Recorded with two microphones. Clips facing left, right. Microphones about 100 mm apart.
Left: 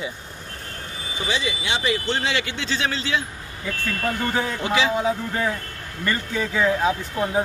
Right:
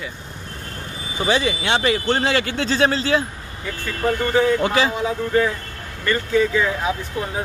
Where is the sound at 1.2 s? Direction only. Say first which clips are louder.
Right 7 dB; 50° right (ahead or behind).